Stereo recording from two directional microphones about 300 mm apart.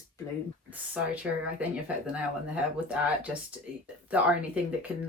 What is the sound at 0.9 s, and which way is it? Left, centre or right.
Speech, centre.